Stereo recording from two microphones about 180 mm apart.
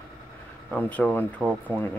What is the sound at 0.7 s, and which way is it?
Speech, 10° left (ahead or behind).